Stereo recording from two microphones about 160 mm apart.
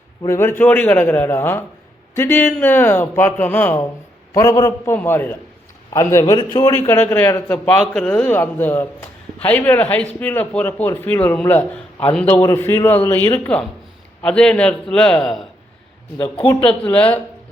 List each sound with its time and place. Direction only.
0.2 s a man's voice: 15° left (ahead or behind)
16.5 s speech: 30° left (ahead or behind)
16.8 s a man's voice: 10° left (ahead or behind)